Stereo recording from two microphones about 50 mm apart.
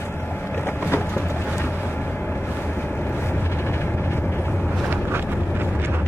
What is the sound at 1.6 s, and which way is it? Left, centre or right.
Vehicle, left.